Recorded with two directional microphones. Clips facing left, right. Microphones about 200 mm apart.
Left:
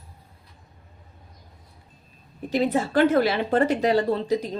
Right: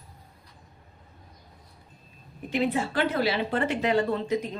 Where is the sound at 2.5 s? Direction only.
40° left (ahead or behind).